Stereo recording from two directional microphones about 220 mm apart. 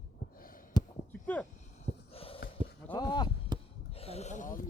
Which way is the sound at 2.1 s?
25° left (ahead or behind).